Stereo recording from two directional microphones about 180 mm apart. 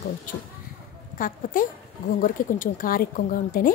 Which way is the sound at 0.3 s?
50° left (ahead or behind).